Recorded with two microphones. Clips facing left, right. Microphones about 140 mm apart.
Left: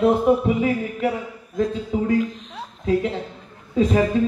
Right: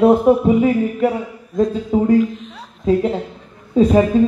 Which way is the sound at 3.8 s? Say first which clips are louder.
Right 6 dB; 30° right (ahead or behind).